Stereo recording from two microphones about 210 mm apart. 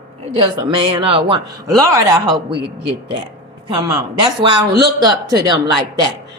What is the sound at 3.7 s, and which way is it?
Speech, 15° right (ahead or behind).